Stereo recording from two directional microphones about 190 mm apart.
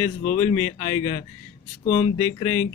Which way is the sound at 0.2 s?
40° left (ahead or behind).